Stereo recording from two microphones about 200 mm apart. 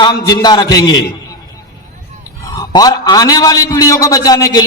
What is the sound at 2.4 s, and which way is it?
A man's voice, 15° left (ahead or behind).